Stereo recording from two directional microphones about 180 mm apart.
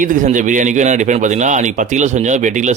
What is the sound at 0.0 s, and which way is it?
A man's voice, 45° right (ahead or behind).